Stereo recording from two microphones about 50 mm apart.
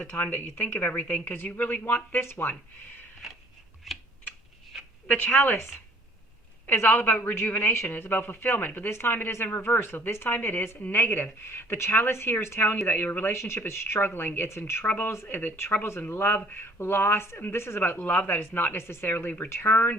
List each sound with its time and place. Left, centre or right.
0.2 s speech: left
3.9 s typing: centre
5.0 s speech: left
6.7 s speech: left
8.9 s speech: left
12.1 s speech: left
12.5 s speech: left
13.3 s speech: left
17.7 s speech: left